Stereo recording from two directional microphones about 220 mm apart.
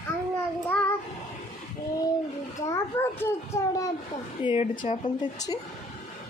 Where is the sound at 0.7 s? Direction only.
10° left (ahead or behind).